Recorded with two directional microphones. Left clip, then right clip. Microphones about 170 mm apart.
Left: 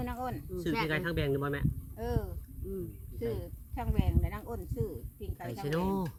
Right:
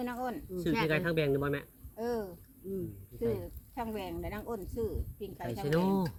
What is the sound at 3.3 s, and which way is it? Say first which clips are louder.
Speech: right 2 dB; 15° right (ahead or behind).